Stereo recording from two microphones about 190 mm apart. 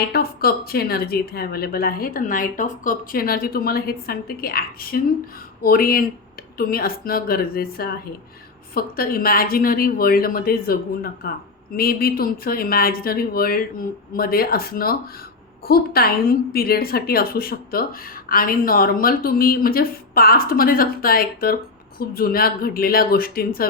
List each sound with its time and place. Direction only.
0.1 s speech: 55° left (ahead or behind)